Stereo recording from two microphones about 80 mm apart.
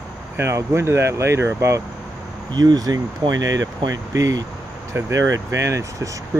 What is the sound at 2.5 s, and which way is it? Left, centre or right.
Speech, right.